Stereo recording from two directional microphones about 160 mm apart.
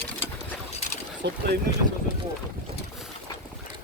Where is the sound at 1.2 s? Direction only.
90° right.